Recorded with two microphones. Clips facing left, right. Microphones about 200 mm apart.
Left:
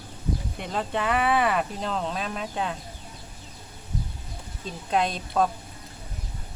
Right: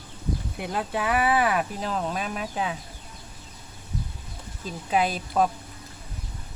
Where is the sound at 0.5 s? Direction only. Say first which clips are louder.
Right 1 dB; 5° right (ahead or behind).